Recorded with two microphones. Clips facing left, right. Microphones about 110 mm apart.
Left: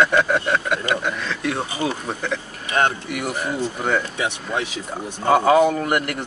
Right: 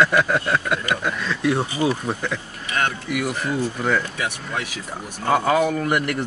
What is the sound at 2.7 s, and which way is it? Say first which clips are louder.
Speech: left 4 dB; 30° left (ahead or behind).